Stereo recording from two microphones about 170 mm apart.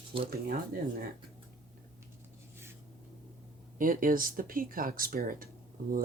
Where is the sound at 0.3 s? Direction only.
60° right (ahead or behind).